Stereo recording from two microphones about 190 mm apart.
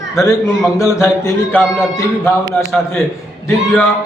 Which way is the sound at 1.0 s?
10° left (ahead or behind).